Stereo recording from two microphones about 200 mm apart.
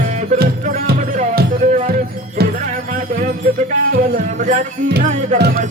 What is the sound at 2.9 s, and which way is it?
Music, 40° right (ahead or behind).